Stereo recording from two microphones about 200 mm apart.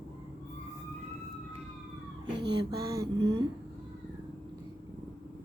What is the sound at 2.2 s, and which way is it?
Speech, 20° right (ahead or behind).